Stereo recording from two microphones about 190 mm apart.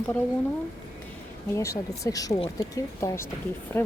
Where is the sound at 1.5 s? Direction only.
15° left (ahead or behind).